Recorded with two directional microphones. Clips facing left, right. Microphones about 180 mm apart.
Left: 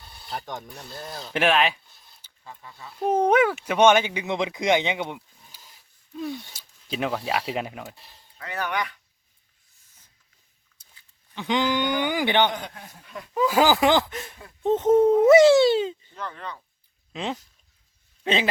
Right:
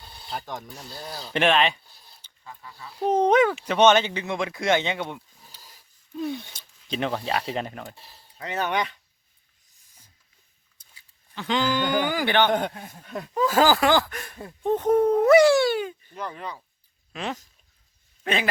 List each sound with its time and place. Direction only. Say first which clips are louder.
0.3 s speech: even; centre (ahead or behind)
1.9 s a sound: right 2 dB; 35° right (ahead or behind)
2.4 s speech: even; 25° left (ahead or behind)
3.0 s speech: right 1 dB; 10° left (ahead or behind)
8.4 s speech: right 3 dB; 20° right (ahead or behind)
11.3 s speech: left 1 dB; 15° left (ahead or behind)
12.5 s speech: right 8 dB; 55° right (ahead or behind)
13.3 s speech: even; 10° left (ahead or behind)
16.1 s speech: right 2 dB; 10° right (ahead or behind)
17.1 s speech: left 1 dB; 20° left (ahead or behind)
18.2 s a sound: left 2 dB; 25° left (ahead or behind)